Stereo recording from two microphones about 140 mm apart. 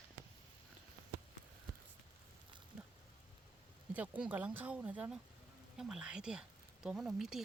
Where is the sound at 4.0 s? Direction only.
10° right (ahead or behind).